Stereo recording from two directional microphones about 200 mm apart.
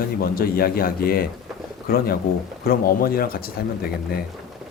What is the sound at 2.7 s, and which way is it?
A man's voice, 45° left (ahead or behind).